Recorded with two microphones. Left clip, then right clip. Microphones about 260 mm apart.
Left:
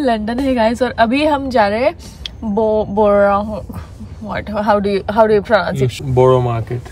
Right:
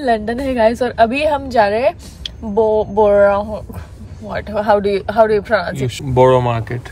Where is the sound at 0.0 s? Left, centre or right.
Centre.